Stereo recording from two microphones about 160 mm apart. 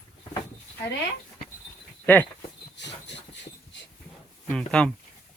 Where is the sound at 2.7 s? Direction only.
90° left.